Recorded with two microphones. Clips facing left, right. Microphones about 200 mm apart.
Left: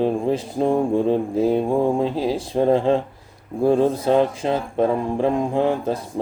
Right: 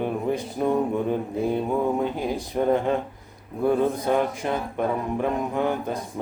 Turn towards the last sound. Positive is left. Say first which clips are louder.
# left 5 dB
turn(degrees=30)  # may be behind; listen again after turning